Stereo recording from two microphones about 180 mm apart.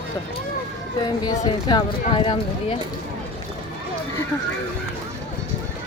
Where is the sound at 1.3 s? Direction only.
25° left (ahead or behind).